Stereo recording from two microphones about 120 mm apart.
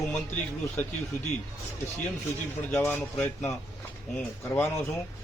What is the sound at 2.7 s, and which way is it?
A man's voice, 20° left (ahead or behind).